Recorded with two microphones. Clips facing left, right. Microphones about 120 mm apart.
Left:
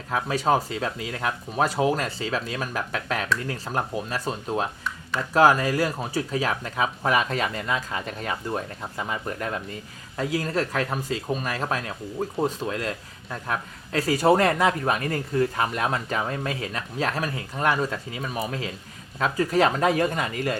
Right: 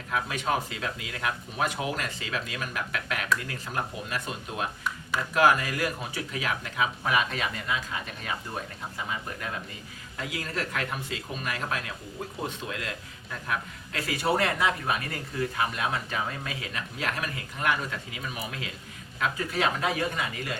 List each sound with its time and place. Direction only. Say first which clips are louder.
0.1 s speech: left 6 dB; 35° left (ahead or behind)
9.0 s speech: left 6 dB; 45° left (ahead or behind)